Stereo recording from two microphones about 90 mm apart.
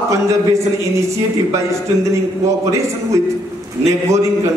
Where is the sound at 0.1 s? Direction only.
35° right (ahead or behind).